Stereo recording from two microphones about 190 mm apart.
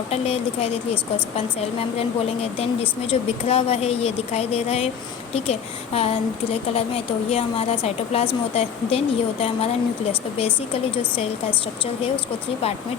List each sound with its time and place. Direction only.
0.1 s a woman's voice: 30° left (ahead or behind)
2.0 s a woman's voice: 30° left (ahead or behind)